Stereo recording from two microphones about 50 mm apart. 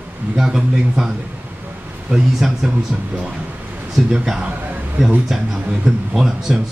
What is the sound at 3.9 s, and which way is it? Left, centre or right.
Speech, centre.